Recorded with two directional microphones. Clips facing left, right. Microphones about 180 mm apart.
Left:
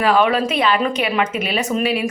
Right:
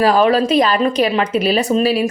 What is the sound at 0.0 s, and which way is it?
Speech, 35° right (ahead or behind).